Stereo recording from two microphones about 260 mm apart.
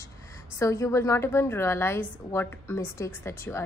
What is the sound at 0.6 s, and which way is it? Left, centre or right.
A woman's voice, centre.